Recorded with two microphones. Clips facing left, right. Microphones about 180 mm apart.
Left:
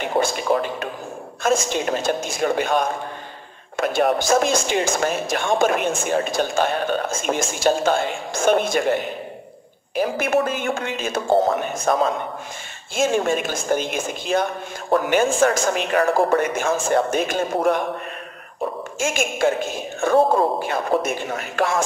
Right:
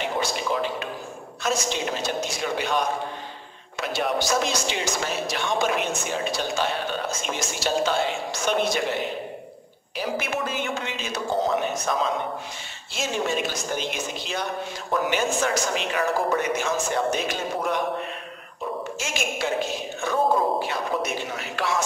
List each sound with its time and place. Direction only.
0.0 s a man's voice: 50° left (ahead or behind)
18.9 s speech: 50° left (ahead or behind)